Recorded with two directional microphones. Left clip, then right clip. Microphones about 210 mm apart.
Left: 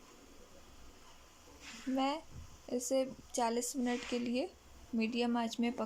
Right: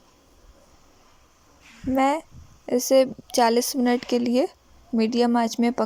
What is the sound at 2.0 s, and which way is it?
Speech, 35° right (ahead or behind).